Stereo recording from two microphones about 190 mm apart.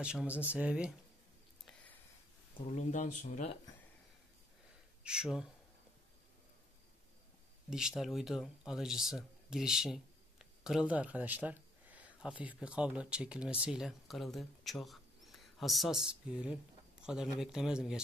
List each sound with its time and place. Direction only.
0.0 s speech: 5° right (ahead or behind)
2.6 s speech: 40° left (ahead or behind)
5.0 s speech: 5° right (ahead or behind)
7.7 s speech: centre (ahead or behind)